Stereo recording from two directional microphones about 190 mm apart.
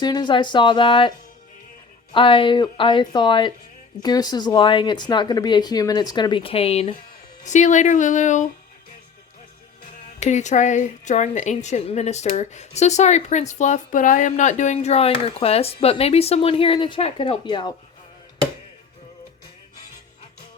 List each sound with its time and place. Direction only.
0.0 s speech: 20° left (ahead or behind)
2.1 s a woman's voice: 25° left (ahead or behind)
10.0 s a woman's voice: 40° left (ahead or behind)